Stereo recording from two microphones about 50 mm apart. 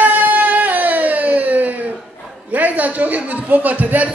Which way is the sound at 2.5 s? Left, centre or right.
Right.